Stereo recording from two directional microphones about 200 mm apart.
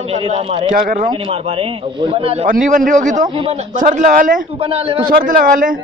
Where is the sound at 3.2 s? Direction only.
25° right (ahead or behind); by 4.4 s 40° right (ahead or behind).